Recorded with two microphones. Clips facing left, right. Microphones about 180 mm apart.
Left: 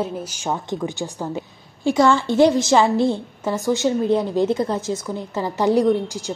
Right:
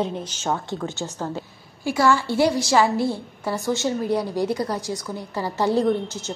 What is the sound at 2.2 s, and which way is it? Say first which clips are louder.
A woman's voice: left 5 dB; 20° left (ahead or behind).